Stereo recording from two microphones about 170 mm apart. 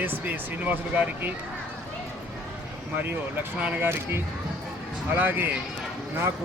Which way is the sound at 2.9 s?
10° right (ahead or behind).